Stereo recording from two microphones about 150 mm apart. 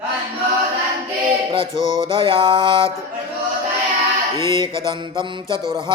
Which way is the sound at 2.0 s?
35° right (ahead or behind).